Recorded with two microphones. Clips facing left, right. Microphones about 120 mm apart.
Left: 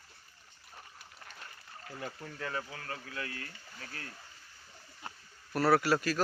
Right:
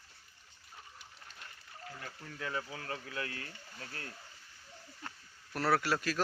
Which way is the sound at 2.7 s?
25° right (ahead or behind).